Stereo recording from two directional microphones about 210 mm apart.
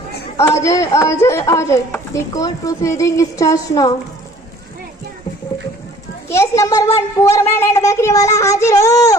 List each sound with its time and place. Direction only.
0.3 s a child's voice: 15° left (ahead or behind)
6.2 s a child's voice: 15° left (ahead or behind)